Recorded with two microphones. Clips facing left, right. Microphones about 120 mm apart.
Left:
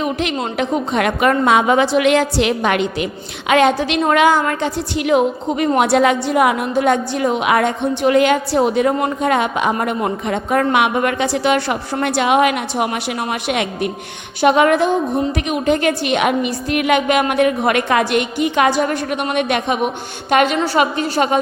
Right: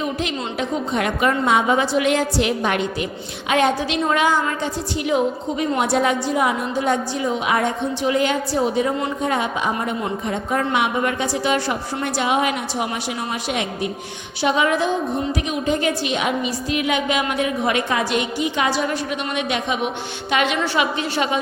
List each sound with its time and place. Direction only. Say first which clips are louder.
0.0 s a woman's voice: left 4 dB; 70° left (ahead or behind); by 21.3 s 45° left (ahead or behind)